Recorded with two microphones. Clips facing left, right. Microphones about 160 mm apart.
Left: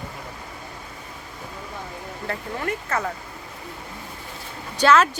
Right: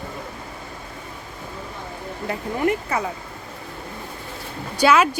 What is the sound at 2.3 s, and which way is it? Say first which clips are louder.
Speech: right 6 dB; 15° right (ahead or behind).